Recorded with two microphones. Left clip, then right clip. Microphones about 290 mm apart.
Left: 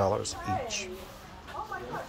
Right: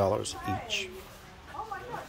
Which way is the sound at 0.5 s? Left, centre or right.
Right.